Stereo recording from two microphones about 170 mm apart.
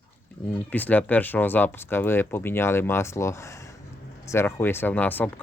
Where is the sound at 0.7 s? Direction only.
10° left (ahead or behind).